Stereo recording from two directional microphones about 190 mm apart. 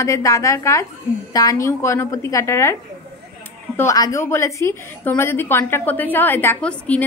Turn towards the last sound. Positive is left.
turn(degrees=5)  # may be behind; listen again after turning